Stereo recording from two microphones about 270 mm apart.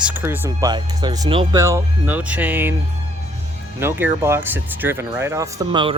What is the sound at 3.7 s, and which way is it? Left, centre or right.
Speech, centre.